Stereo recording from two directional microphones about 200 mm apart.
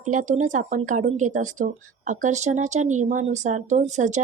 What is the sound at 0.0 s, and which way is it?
Speech, 40° right (ahead or behind).